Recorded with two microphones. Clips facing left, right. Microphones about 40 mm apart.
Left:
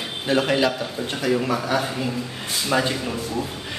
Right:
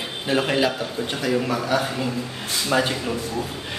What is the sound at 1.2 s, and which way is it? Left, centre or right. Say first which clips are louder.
Speech: left 1 dB; centre.